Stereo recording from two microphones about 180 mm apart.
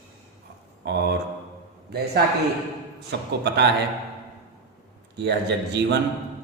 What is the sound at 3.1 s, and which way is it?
Speech, 70° right (ahead or behind).